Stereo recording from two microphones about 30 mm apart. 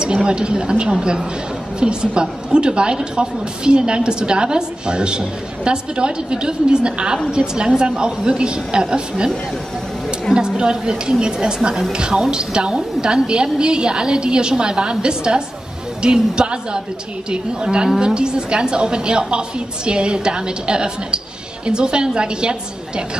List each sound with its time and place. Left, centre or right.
0.0 s a woman's voice: right
10.6 s a woman's voice: right